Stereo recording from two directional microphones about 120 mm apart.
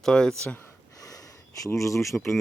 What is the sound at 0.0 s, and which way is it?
Speech, 5° left (ahead or behind).